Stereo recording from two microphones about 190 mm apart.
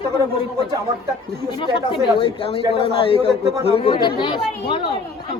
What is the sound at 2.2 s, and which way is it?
Speech, 30° left (ahead or behind).